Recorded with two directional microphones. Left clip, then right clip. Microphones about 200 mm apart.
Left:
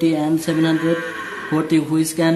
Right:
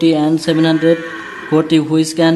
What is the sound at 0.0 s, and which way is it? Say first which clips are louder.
Speech: right 5 dB; 25° right (ahead or behind).